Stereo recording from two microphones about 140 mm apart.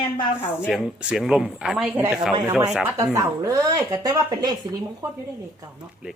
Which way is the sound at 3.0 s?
25° right (ahead or behind).